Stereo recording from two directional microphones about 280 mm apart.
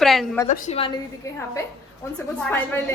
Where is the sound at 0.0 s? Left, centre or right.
Centre.